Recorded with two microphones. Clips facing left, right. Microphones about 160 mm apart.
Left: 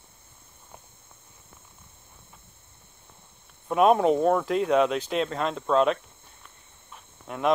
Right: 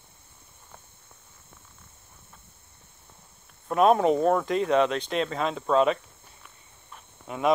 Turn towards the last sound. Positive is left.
turn(degrees=0)  # may be behind; listen again after turning